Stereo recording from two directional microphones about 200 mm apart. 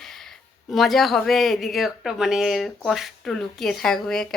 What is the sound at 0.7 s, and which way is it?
Speech, centre (ahead or behind).